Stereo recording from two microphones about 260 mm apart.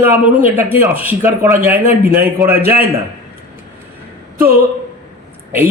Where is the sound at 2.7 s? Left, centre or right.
Centre.